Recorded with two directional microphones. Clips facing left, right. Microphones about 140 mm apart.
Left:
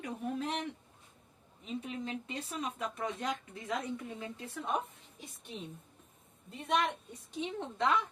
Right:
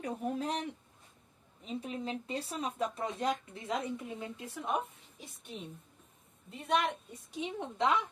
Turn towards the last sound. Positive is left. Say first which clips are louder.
# right 1 dB
turn(degrees=-15)  # may be behind; listen again after turning